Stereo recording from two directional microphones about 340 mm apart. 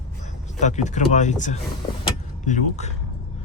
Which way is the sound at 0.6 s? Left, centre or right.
Left.